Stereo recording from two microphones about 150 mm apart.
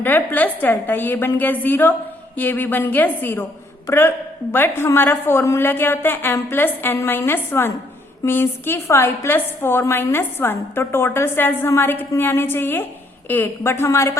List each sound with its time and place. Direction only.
0.0 s a woman's voice: 10° left (ahead or behind)